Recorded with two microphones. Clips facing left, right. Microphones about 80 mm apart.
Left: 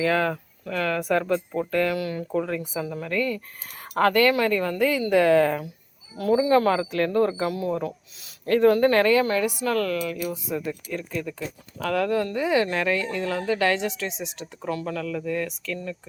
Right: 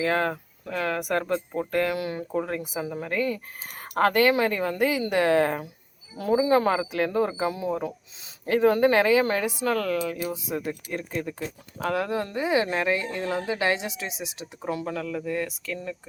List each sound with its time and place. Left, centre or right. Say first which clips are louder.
0.0 s speech: left 2 dB; centre
1.9 s a woman's voice: left 2 dB; right
4.4 s a woman's voice: left 1 dB; centre
5.1 s speech: left 4 dB; centre
5.5 s a woman's voice: left 3 dB; right
6.9 s speech: left 3 dB; centre
7.4 s a woman's voice: left 1 dB; right
9.2 s a woman's voice: left 1 dB; right
10.7 s speech: left 1 dB; right
11.9 s speech: left 6 dB; centre
12.4 s speech: right 2 dB; centre
14.7 s speech: left 1 dB; centre